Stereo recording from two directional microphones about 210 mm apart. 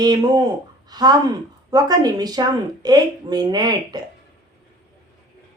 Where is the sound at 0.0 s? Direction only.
20° right (ahead or behind).